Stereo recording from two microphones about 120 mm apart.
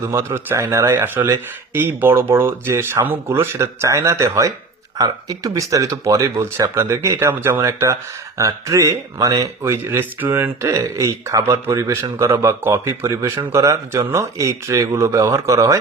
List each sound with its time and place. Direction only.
0.0 s speech: 20° right (ahead or behind)